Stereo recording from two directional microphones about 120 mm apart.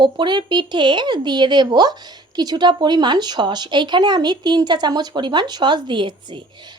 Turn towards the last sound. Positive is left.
turn(degrees=-40)  # may be behind; listen again after turning